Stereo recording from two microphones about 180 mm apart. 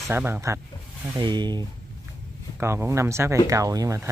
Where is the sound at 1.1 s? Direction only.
25° right (ahead or behind).